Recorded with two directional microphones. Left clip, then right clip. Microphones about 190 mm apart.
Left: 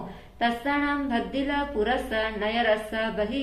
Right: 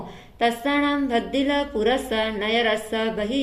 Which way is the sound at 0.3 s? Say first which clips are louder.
Right 4 dB; 40° right (ahead or behind).